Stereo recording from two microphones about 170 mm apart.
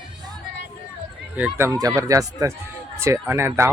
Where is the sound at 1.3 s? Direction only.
10° right (ahead or behind).